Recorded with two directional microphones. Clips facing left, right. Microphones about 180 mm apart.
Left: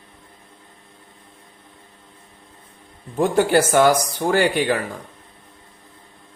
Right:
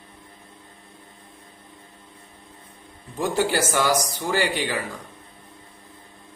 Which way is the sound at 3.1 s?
50° left (ahead or behind).